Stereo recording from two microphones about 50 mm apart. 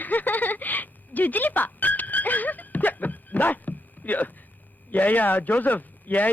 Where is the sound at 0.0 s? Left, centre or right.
Left.